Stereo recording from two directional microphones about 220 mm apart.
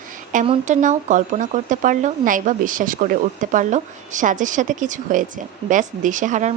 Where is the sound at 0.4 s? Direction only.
35° right (ahead or behind).